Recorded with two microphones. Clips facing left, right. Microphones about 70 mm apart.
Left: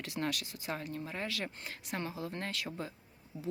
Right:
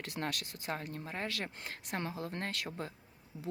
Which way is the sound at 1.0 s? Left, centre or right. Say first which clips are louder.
Left 1 dB; right.